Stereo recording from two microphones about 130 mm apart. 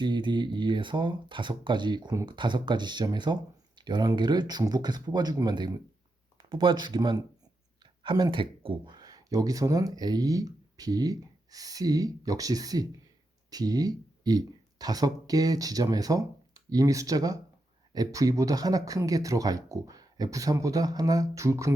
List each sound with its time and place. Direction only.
0.0 s speech: 35° right (ahead or behind)